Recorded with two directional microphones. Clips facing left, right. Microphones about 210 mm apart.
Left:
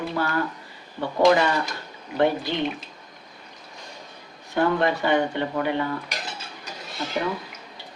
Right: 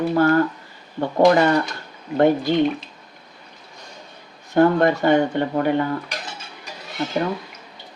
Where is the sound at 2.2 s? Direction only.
45° right (ahead or behind).